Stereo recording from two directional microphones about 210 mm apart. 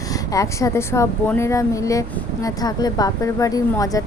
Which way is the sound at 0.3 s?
15° left (ahead or behind).